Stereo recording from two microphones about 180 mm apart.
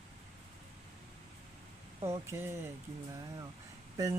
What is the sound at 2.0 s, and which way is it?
Speech, 15° right (ahead or behind).